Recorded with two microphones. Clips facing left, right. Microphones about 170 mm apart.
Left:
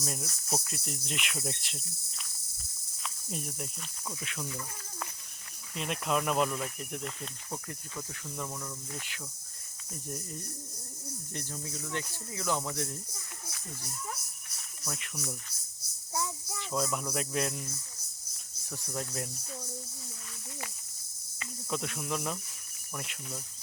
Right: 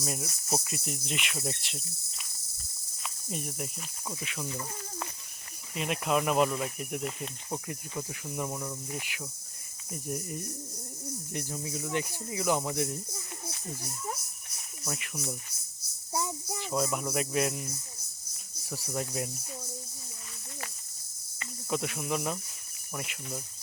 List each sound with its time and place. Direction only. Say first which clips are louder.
0.0 s cricket: right 3 dB; 5° right (ahead or behind)
3.0 s speech: right 2 dB; 5° right (ahead or behind)
4.2 s cricket: right 1 dB; 5° right (ahead or behind)
5.7 s speech: right 3 dB; 5° right (ahead or behind)
14.8 s cricket: right 3 dB; 5° right (ahead or behind)
16.1 s a sound: right 3 dB; 20° right (ahead or behind)
16.6 s cricket: right 2 dB; 5° right (ahead or behind)
18.7 s speech: right 3 dB; 5° right (ahead or behind)
21.7 s cricket: right 3 dB; 5° right (ahead or behind)